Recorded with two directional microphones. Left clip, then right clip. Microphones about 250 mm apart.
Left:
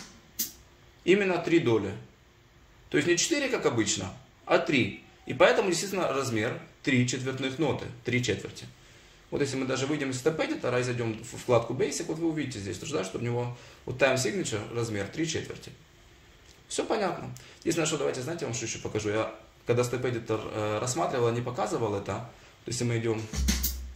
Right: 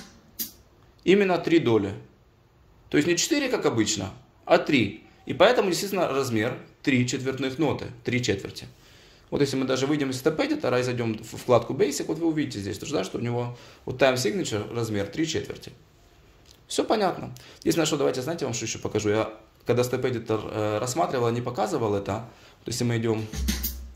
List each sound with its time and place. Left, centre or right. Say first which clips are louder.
1.0 s speech: right 4 dB; right
2.9 s speech: right 3 dB; right